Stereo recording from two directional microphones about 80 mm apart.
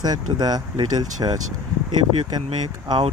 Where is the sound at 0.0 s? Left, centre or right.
Right.